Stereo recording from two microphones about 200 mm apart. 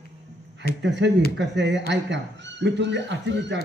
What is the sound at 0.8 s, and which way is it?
A man's voice, 60° right (ahead or behind).